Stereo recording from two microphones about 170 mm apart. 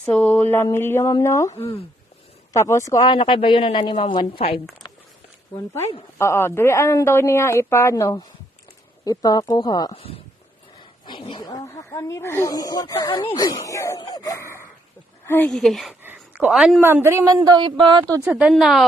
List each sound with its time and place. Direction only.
0.0 s speech: 10° left (ahead or behind); by 4.6 s 30° left (ahead or behind)
4.8 s a sound: 25° left (ahead or behind)
6.1 s speech: 15° left (ahead or behind)
9.9 s a woman's voice: 35° left (ahead or behind); by 16.0 s centre (ahead or behind)
16.0 s a woman's voice: 10° right (ahead or behind); by 18.2 s 25° right (ahead or behind)
18.3 s a woman's voice: 5° right (ahead or behind)